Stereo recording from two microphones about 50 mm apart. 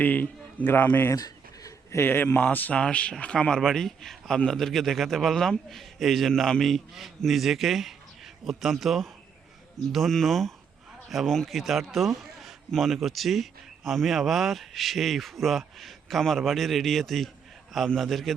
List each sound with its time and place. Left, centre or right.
0.0 s a man's voice: left; by 9.0 s centre
10.1 s a man's voice: centre